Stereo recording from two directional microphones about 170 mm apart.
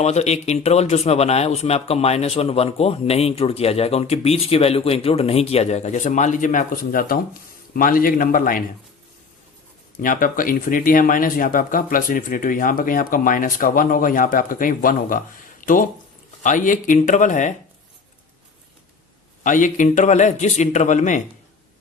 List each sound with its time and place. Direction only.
0.0 s a man's voice: 40° left (ahead or behind); by 8.6 s 55° left (ahead or behind)
10.0 s speech: 55° left (ahead or behind)
19.4 s speech: 50° left (ahead or behind)